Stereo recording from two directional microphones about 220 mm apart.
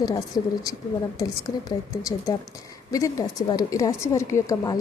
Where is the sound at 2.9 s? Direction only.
15° left (ahead or behind).